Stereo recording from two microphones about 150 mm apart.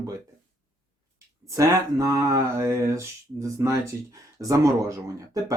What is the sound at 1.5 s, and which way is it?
Speech, 20° right (ahead or behind).